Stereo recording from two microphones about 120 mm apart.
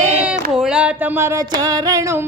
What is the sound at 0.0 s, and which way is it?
Child singing, 10° right (ahead or behind).